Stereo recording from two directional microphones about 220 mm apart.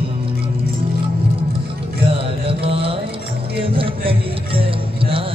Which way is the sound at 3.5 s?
25° right (ahead or behind).